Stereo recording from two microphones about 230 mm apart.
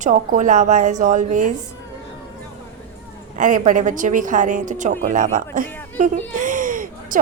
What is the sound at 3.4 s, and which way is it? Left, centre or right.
A woman's voice, right.